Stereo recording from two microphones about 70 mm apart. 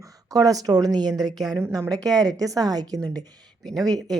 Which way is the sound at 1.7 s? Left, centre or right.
Right.